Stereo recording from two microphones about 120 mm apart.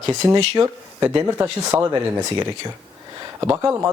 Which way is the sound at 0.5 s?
25° right (ahead or behind).